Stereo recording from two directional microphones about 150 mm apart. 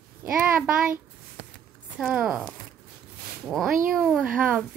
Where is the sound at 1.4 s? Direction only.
45° right (ahead or behind).